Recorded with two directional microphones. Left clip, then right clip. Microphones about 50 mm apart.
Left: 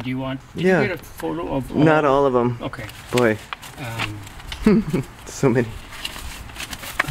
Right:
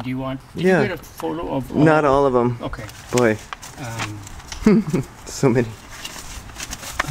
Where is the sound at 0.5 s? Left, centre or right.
Right.